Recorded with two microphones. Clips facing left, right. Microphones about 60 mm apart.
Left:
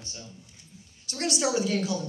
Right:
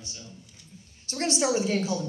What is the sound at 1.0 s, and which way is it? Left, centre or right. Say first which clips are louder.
Speech: right 2 dB; right.